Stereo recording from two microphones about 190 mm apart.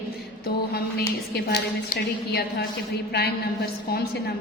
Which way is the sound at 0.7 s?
55° left (ahead or behind).